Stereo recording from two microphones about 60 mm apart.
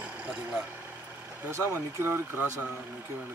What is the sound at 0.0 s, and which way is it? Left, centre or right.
Vehicle, centre.